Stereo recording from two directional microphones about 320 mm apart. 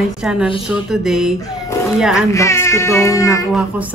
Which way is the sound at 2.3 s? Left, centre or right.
Centre.